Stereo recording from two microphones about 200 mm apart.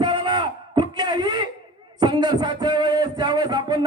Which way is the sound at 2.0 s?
20° right (ahead or behind).